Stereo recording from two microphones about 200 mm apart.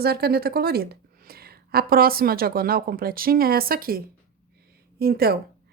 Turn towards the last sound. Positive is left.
turn(degrees=-50)  # may be behind; listen again after turning